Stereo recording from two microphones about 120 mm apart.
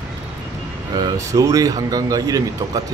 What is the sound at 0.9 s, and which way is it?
Speech, 30° right (ahead or behind).